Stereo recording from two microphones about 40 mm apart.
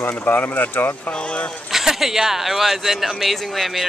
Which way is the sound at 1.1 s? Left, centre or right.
Left.